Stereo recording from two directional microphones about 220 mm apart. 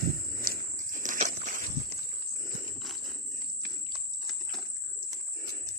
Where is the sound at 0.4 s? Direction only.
40° right (ahead or behind).